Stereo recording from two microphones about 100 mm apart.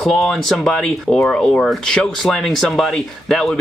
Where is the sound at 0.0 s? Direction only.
5° left (ahead or behind).